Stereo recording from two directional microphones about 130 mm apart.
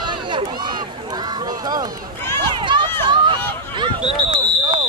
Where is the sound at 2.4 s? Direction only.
35° right (ahead or behind).